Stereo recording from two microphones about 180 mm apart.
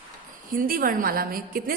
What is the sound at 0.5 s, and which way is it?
A woman's voice, 50° right (ahead or behind).